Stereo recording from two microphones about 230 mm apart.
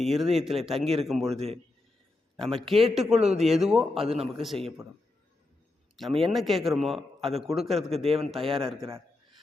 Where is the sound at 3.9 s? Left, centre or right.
Right.